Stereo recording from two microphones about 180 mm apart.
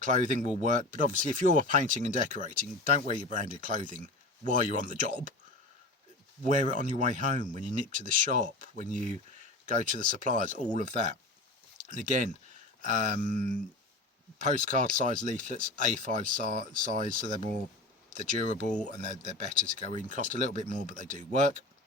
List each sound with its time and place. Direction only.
0.0 s speech: 45° right (ahead or behind)
6.4 s speech: 45° right (ahead or behind)
14.6 s speech: 50° right (ahead or behind)
19.0 s speech: 45° right (ahead or behind)